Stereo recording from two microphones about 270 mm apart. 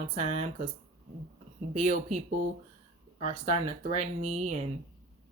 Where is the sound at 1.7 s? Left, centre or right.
Right.